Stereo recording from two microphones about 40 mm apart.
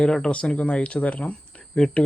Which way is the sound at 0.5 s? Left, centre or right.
Left.